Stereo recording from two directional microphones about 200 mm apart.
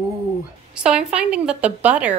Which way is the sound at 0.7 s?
5° right (ahead or behind).